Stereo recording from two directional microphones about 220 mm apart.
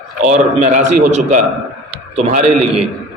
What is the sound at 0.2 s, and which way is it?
A man's voice, 35° right (ahead or behind).